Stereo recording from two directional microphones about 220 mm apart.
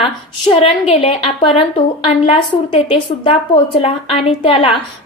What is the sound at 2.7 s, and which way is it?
A woman's voice, 25° left (ahead or behind).